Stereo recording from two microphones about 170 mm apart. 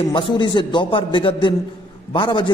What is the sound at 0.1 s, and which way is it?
A man's voice, 25° left (ahead or behind).